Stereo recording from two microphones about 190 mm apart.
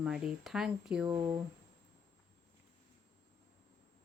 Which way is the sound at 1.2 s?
20° right (ahead or behind).